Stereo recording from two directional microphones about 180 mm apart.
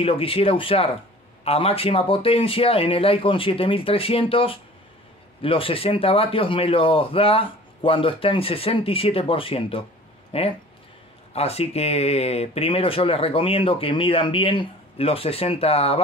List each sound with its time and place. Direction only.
0.0 s speech: 30° left (ahead or behind)